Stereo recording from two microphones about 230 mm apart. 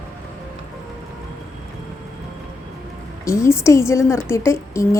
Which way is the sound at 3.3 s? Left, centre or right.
Centre.